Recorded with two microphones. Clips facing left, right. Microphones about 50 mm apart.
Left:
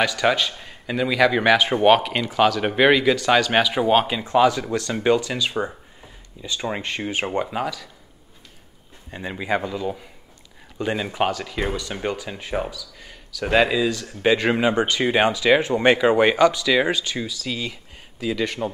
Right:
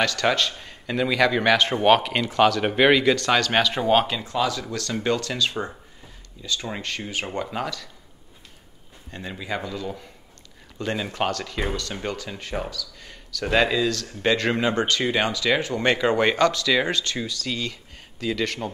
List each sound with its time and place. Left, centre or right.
0.0 s a man's voice: centre
4.1 s speech: left
7.4 s speech: centre
9.1 s speech: left